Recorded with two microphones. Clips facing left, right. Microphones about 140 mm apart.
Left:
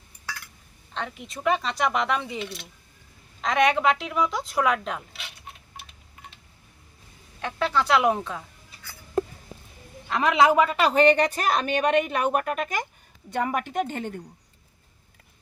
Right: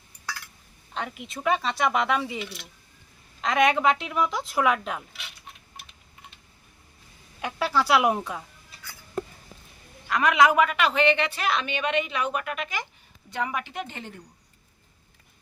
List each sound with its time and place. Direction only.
0.9 s speech: 5° right (ahead or behind)
3.4 s speech: centre (ahead or behind)
7.4 s speech: 5° right (ahead or behind)
10.1 s a woman's voice: 30° left (ahead or behind); by 14.1 s 50° left (ahead or behind)